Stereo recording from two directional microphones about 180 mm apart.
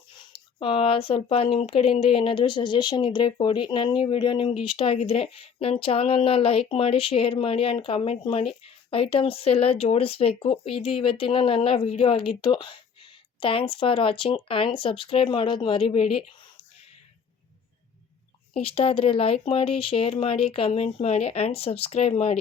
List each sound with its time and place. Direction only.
0.1 s speech: 30° left (ahead or behind)
18.5 s speech: 35° left (ahead or behind)